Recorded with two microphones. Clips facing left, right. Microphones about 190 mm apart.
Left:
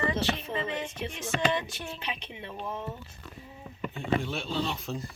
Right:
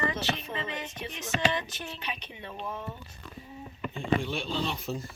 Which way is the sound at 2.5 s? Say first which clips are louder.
Left 1 dB; 10° left (ahead or behind).